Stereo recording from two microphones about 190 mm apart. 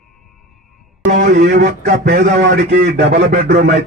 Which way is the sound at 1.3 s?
60° right (ahead or behind).